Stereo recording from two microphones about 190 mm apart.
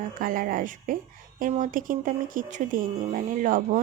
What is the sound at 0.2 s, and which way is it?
Speech, 45° right (ahead or behind).